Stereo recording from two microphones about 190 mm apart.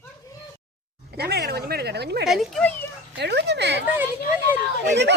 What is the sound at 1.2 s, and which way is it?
A woman's voice, 55° right (ahead or behind).